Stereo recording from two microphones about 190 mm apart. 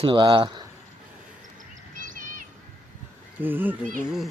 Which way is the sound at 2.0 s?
45° right (ahead or behind).